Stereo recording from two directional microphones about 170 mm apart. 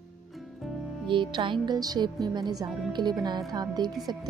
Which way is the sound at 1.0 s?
30° right (ahead or behind).